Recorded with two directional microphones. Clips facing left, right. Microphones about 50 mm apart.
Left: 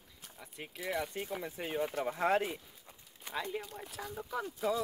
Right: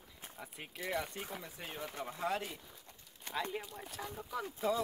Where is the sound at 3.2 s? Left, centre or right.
Centre.